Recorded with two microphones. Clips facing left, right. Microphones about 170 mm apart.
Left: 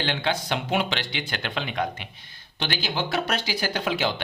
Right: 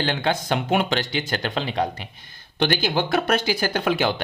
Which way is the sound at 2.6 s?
50° right (ahead or behind).